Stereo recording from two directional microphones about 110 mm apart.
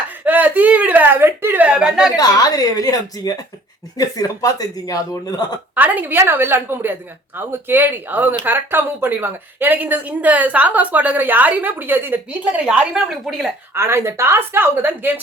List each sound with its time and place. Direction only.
0.3 s a woman's voice: 15° right (ahead or behind)
2.1 s a woman's voice: 35° left (ahead or behind)
5.7 s speech: 15° right (ahead or behind)
13.7 s a woman's voice: 25° right (ahead or behind)